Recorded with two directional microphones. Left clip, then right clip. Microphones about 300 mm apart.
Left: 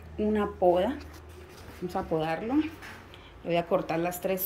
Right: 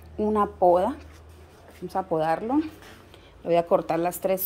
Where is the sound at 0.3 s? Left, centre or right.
Right.